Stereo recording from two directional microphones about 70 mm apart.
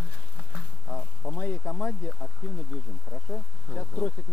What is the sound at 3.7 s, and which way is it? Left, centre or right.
Speech, left.